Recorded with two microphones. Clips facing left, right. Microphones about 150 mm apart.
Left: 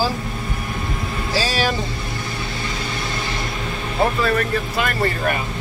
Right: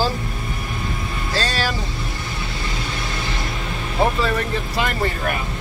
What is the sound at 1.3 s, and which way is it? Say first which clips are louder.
Speech: left 2 dB; 5° left (ahead or behind).